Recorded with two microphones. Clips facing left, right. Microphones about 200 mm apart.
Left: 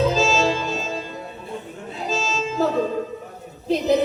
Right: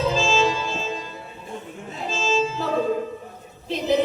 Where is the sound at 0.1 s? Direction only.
40° left (ahead or behind).